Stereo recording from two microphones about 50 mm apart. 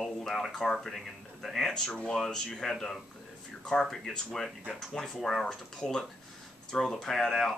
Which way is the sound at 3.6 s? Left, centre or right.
Centre.